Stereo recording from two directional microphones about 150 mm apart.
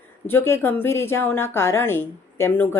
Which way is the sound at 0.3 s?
15° left (ahead or behind).